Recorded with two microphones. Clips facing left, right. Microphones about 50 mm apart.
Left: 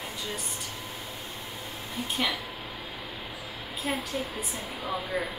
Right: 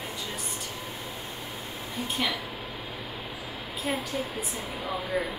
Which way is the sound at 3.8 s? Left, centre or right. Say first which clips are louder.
Right 1 dB; centre.